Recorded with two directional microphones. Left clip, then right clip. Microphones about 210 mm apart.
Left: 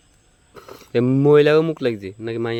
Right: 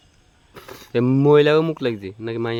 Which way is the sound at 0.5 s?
45° right (ahead or behind).